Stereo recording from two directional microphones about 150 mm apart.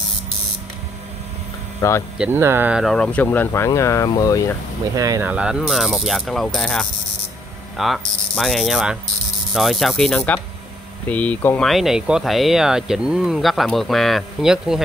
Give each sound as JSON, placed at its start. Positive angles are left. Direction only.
{"t": 1.8, "sound": "speech", "side_deg": 20}
{"t": 2.1, "sound": "speech", "side_deg": -10}
{"t": 2.8, "sound": "speech", "side_deg": 5}
{"t": 4.9, "sound": "speech", "side_deg": -20}
{"t": 5.3, "sound": "speech", "side_deg": -5}
{"t": 11.7, "sound": "speech", "side_deg": -5}